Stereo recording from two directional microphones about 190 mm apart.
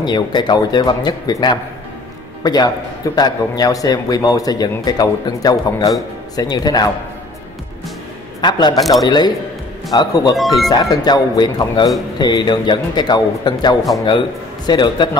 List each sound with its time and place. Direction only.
0.0 s a man's voice: 25° left (ahead or behind)
8.4 s a man's voice: 20° left (ahead or behind)
8.7 s speech: centre (ahead or behind)
9.0 s a man's voice: 20° left (ahead or behind)
10.3 s speech: centre (ahead or behind)
10.7 s a man's voice: 20° left (ahead or behind)